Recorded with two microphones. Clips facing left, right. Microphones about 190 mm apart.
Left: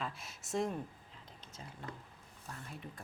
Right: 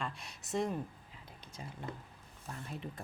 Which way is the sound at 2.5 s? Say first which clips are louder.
Right 3 dB; 25° right (ahead or behind).